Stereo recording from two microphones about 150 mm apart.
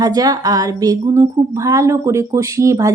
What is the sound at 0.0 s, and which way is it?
A woman's voice, 25° right (ahead or behind).